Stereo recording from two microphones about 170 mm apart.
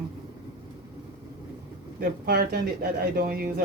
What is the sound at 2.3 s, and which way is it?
A man's voice, 60° right (ahead or behind).